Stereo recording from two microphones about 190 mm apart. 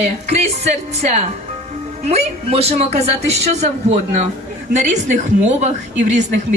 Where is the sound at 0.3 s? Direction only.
35° right (ahead or behind).